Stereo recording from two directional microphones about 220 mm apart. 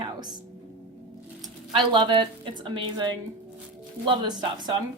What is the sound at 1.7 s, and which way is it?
A woman's voice, 20° right (ahead or behind).